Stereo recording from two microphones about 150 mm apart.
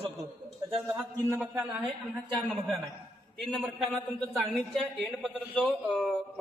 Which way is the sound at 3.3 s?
Centre (ahead or behind).